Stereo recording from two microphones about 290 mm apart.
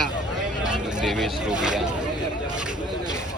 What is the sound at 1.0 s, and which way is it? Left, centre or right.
Speech, centre.